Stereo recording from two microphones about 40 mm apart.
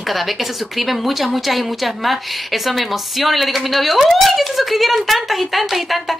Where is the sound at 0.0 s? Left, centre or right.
Centre.